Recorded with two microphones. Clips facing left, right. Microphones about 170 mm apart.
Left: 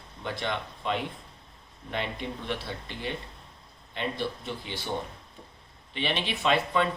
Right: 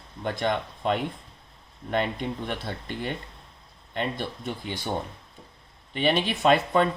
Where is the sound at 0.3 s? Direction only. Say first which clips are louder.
Right 5 dB; 50° right (ahead or behind).